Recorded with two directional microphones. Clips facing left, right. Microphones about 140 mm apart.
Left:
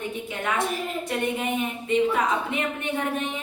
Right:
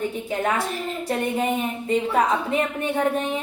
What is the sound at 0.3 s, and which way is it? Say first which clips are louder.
Speech: right 1 dB; 35° right (ahead or behind).